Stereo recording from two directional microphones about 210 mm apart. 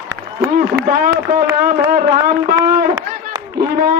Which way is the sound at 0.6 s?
40° right (ahead or behind).